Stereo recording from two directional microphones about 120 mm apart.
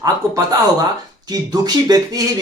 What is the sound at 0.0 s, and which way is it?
Speech, 30° right (ahead or behind).